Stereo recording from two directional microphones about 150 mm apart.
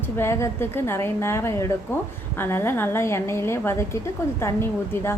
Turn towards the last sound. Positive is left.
turn(degrees=15)  # may be behind; listen again after turning